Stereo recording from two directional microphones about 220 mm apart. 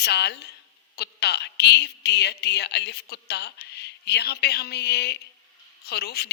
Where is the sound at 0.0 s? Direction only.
50° left (ahead or behind).